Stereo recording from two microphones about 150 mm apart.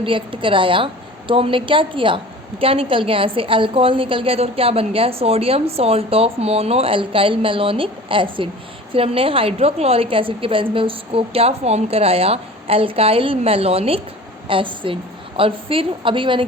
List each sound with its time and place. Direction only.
0.0 s a woman's voice: 35° right (ahead or behind)